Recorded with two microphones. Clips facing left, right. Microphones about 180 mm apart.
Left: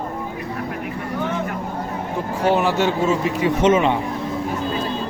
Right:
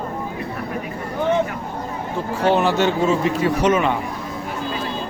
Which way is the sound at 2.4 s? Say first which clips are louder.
Right 1 dB; 10° left (ahead or behind).